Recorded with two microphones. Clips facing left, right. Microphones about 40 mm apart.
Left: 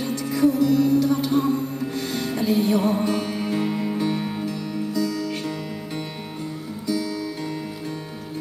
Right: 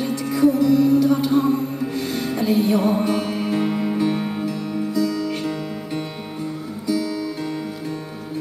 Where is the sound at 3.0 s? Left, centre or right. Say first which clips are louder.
Right 2 dB; right.